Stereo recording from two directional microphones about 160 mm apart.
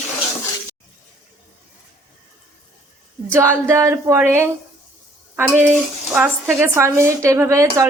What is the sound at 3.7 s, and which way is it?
Speech, 15° right (ahead or behind).